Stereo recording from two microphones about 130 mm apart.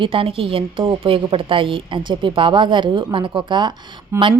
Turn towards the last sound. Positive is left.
turn(degrees=-20)  # may be behind; listen again after turning